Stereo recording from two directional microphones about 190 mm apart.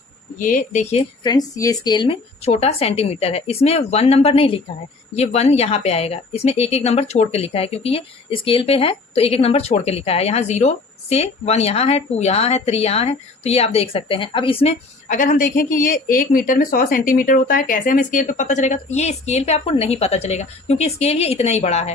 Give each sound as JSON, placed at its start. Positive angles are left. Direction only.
{"t": 0.3, "sound": "speech", "side_deg": 45}
{"t": 1.2, "sound": "speech", "side_deg": 20}
{"t": 15.0, "sound": "a woman's voice", "side_deg": 45}